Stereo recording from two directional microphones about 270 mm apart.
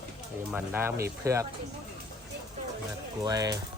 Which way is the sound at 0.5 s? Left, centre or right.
Centre.